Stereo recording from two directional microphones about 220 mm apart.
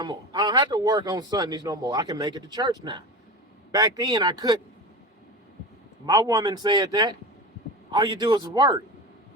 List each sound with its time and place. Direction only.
0.0 s a man's voice: 20° right (ahead or behind)
6.1 s a man's voice: 15° right (ahead or behind)